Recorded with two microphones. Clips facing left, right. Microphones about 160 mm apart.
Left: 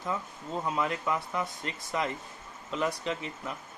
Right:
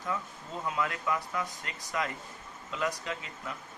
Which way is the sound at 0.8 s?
25° left (ahead or behind).